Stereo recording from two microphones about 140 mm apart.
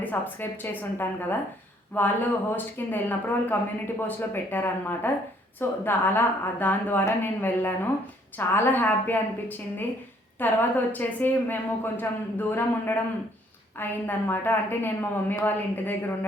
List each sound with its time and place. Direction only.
0.0 s a woman's voice: 15° left (ahead or behind)